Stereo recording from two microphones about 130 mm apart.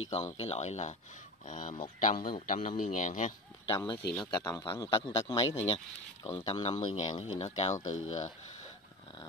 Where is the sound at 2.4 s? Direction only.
90° left.